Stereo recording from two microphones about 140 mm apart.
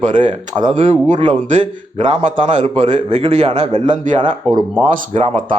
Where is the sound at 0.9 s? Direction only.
45° right (ahead or behind).